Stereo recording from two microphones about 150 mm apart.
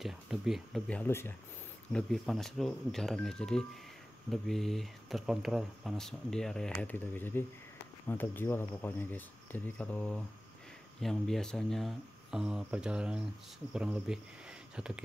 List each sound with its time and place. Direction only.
0.0 s speech: centre (ahead or behind); by 1.3 s 15° left (ahead or behind)
1.9 s speech: 5° left (ahead or behind)